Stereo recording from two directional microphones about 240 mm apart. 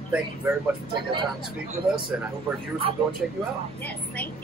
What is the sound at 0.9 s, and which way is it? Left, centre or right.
Speech, centre.